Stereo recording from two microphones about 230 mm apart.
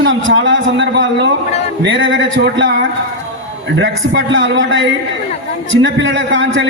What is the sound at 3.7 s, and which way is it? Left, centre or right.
A man's voice, right.